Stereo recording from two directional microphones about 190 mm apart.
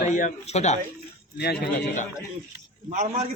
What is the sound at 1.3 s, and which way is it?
Speech, 60° left (ahead or behind).